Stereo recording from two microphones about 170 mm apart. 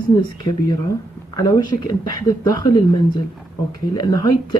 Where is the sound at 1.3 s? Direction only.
20° left (ahead or behind).